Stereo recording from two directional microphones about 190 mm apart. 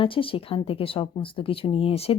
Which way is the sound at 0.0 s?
30° left (ahead or behind).